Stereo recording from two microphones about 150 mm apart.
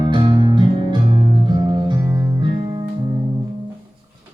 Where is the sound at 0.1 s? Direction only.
30° right (ahead or behind).